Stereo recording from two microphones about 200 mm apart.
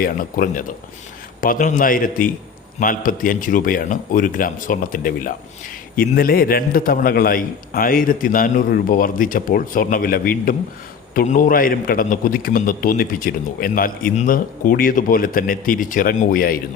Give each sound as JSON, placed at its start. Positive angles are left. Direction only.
{"t": 0.0, "sound": "a man's voice", "side_deg": 45}